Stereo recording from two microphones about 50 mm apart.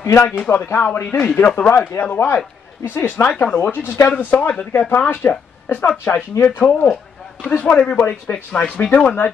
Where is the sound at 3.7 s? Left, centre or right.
Left.